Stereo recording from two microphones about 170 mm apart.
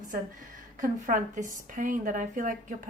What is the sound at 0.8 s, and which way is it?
Speech, 50° right (ahead or behind).